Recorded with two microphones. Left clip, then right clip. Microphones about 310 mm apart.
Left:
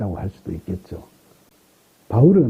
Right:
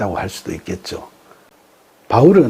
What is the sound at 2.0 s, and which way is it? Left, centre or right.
Speech, centre.